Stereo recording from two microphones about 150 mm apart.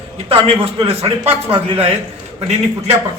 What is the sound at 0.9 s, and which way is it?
Speech, 40° right (ahead or behind).